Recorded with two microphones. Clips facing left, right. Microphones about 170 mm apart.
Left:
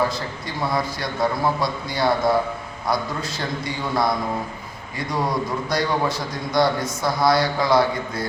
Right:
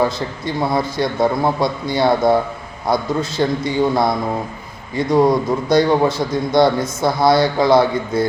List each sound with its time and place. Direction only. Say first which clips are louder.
0.6 s a man's voice: right 6 dB; 25° right (ahead or behind)